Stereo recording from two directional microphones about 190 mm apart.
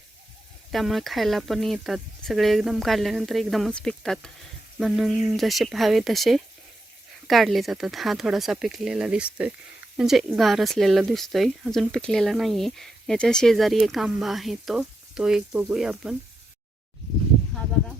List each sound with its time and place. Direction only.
0.7 s speech: centre (ahead or behind)